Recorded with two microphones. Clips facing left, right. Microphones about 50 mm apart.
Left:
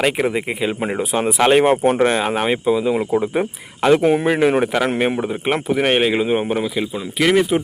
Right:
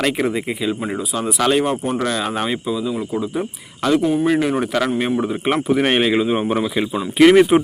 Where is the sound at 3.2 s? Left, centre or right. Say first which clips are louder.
Left 3 dB; left.